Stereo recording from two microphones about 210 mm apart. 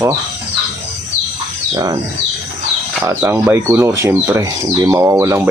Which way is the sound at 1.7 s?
20° right (ahead or behind).